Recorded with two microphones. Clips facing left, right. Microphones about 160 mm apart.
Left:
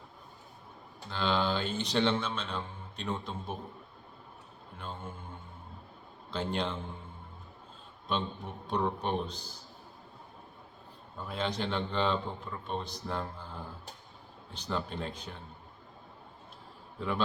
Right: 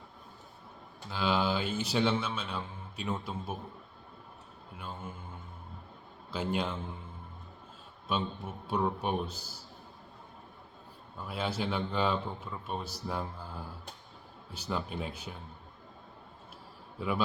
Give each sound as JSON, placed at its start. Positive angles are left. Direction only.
{"t": 1.1, "sound": "speech", "side_deg": -5}
{"t": 4.8, "sound": "speech", "side_deg": -5}
{"t": 6.3, "sound": "speech", "side_deg": -5}
{"t": 8.0, "sound": "speech", "side_deg": -5}
{"t": 11.3, "sound": "a man's voice", "side_deg": -5}
{"t": 14.5, "sound": "speech", "side_deg": -5}
{"t": 17.0, "sound": "speech", "side_deg": -5}